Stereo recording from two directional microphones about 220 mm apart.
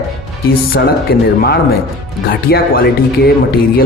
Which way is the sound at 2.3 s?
45° left (ahead or behind).